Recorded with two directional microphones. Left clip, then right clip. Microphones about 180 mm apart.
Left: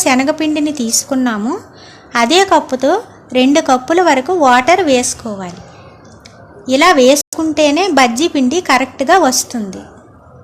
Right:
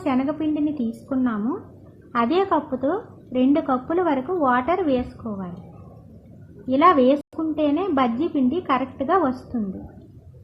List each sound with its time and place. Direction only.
0.0 s a woman's voice: 20° left (ahead or behind)
6.7 s a woman's voice: 15° left (ahead or behind)